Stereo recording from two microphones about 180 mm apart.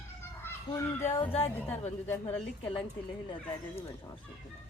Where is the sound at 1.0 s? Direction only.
35° left (ahead or behind).